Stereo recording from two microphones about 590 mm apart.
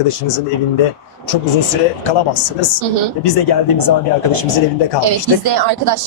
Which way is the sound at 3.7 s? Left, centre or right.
Left.